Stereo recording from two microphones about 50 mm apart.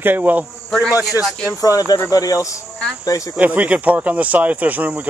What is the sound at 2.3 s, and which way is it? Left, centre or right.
Speech, left.